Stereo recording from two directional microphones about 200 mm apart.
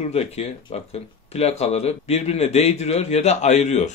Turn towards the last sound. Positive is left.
turn(degrees=35)  # may be behind; listen again after turning